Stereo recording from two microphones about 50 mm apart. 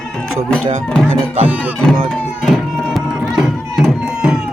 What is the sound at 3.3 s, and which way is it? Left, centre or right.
Music, centre.